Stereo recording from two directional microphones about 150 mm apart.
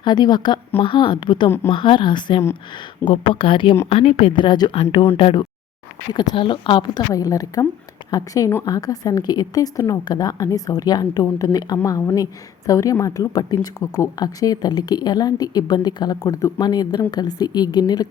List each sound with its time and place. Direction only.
0.0 s a woman's voice: 30° left (ahead or behind)
1.5 s speech: 15° left (ahead or behind)
1.7 s a woman's voice: 35° left (ahead or behind)